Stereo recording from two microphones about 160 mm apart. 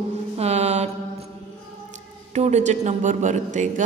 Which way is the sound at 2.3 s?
45° right (ahead or behind).